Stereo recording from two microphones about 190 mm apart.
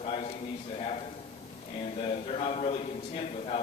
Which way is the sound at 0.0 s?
30° left (ahead or behind).